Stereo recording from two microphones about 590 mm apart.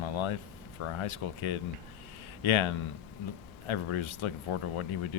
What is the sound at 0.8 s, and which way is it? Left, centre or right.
Speech, left.